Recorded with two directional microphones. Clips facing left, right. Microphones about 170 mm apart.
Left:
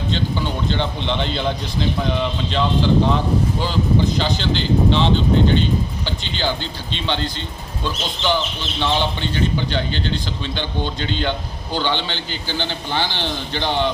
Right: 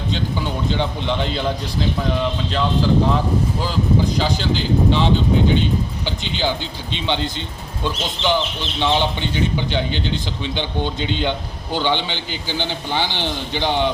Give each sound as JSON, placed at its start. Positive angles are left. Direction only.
{"t": 0.1, "sound": "speech", "side_deg": -10}
{"t": 4.2, "sound": "a man's voice", "side_deg": -5}